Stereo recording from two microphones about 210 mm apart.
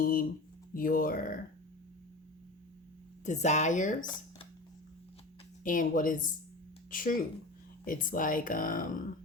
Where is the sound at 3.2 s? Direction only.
35° left (ahead or behind).